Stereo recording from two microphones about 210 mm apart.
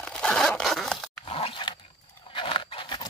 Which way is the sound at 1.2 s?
25° left (ahead or behind).